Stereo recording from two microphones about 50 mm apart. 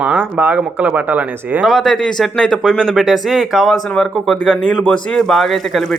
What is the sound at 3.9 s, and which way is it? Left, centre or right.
Speech, centre.